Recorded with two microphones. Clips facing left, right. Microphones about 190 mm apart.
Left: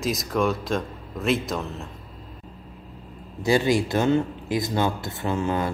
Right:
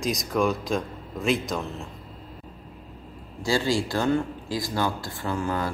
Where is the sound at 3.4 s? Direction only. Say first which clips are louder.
Left 4 dB; 20° left (ahead or behind).